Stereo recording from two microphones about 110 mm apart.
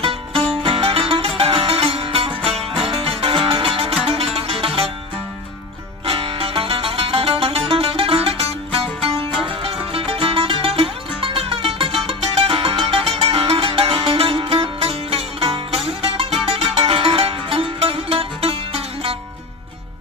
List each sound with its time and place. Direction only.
0.3 s music: 10° left (ahead or behind)
0.6 s music: 55° right (ahead or behind)
6.0 s music: 55° right (ahead or behind)